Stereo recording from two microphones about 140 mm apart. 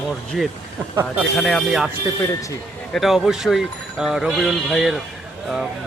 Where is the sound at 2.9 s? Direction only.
Centre (ahead or behind).